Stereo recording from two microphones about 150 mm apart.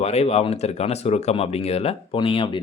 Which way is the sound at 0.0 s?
45° left (ahead or behind).